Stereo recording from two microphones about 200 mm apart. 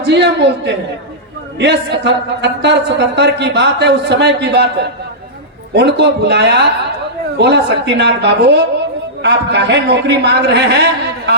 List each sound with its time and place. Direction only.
0.0 s a man's voice: 55° right (ahead or behind)